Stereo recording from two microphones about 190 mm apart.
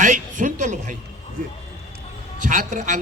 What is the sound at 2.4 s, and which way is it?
Speech, 40° right (ahead or behind).